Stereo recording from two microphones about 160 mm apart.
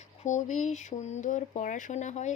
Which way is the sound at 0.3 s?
50° left (ahead or behind).